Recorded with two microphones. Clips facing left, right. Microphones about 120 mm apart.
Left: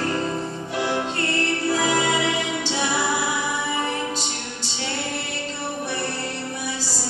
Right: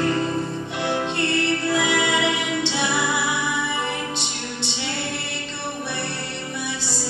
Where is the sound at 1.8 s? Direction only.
35° left (ahead or behind).